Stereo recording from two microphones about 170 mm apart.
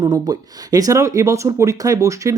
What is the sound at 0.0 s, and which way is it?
Speech, 20° right (ahead or behind).